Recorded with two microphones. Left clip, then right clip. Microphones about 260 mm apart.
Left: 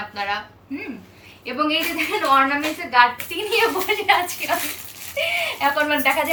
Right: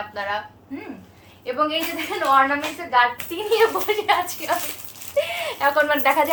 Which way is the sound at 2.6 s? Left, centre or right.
Right.